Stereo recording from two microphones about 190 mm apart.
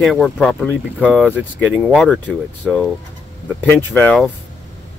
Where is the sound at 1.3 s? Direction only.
5° right (ahead or behind).